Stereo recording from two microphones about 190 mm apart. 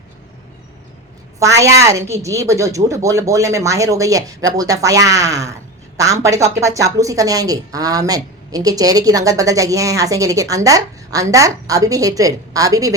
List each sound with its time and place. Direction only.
1.4 s speech: 15° right (ahead or behind)